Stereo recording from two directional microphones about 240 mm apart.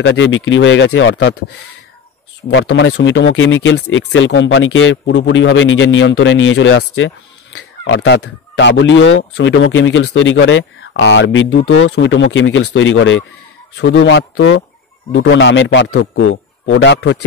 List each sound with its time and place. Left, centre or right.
0.0 s speech: left
2.4 s speech: left